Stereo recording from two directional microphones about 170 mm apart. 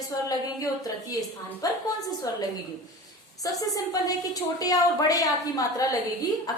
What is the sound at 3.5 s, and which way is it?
A woman's voice, 20° left (ahead or behind).